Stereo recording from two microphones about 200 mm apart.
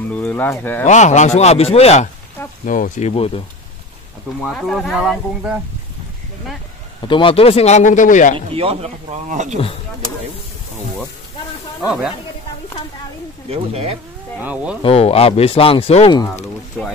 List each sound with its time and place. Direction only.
0.1 s speech: 5° left (ahead or behind)
0.8 s speech: 35° left (ahead or behind)
4.4 s speech: centre (ahead or behind)
7.1 s speech: 25° left (ahead or behind)
8.4 s speech: 30° right (ahead or behind)
13.5 s speech: 30° right (ahead or behind)
14.4 s speech: 5° right (ahead or behind)
14.8 s speech: 30° left (ahead or behind)
16.8 s speech: 5° left (ahead or behind)